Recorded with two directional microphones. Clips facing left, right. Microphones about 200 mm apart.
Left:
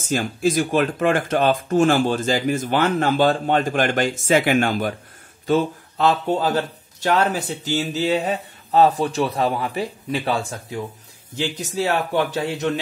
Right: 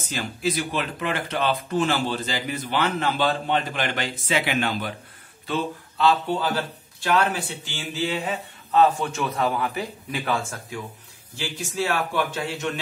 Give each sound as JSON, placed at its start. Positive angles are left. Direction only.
{"t": 0.0, "sound": "speech", "side_deg": 45}
{"t": 11.3, "sound": "speech", "side_deg": 20}
{"t": 12.1, "sound": "speech", "side_deg": 40}